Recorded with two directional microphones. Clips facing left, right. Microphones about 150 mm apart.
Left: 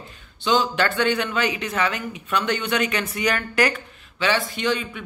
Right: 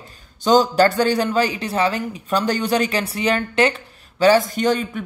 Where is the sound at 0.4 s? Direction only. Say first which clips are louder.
Right 7 dB; 40° right (ahead or behind).